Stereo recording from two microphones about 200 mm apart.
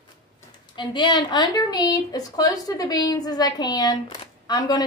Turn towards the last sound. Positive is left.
turn(degrees=20)  # may be behind; listen again after turning